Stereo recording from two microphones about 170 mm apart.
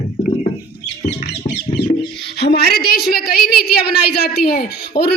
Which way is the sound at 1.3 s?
75° left (ahead or behind).